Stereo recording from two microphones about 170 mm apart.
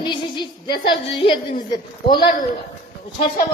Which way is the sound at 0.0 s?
25° left (ahead or behind).